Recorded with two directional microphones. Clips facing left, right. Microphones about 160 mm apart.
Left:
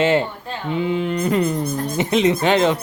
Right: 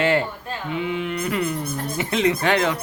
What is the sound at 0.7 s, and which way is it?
Mantra, 35° left (ahead or behind).